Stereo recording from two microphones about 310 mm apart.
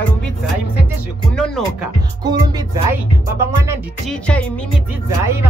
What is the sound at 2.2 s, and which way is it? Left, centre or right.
Speech, centre.